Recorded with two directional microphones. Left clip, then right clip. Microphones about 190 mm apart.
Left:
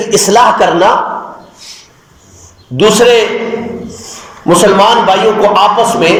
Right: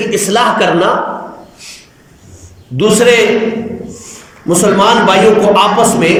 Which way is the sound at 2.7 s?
20° right (ahead or behind).